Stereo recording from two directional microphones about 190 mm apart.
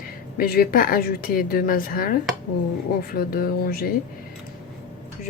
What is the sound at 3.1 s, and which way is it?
Speech, 50° left (ahead or behind).